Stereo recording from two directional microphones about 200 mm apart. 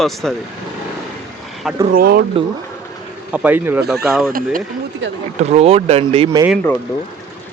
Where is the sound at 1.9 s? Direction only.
50° right (ahead or behind).